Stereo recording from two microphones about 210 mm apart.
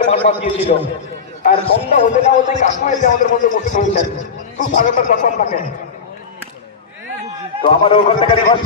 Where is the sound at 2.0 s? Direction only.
35° left (ahead or behind).